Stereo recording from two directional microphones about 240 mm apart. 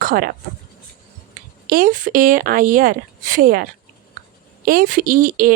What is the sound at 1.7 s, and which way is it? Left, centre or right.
A woman's voice, right.